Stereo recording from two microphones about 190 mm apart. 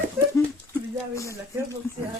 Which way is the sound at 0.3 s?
15° left (ahead or behind).